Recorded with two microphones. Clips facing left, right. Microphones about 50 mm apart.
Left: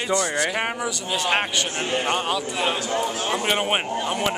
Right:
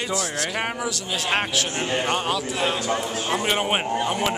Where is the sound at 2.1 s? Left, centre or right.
Centre.